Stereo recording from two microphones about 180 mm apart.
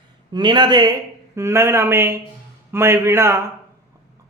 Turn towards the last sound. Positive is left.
turn(degrees=-15)  # may be behind; listen again after turning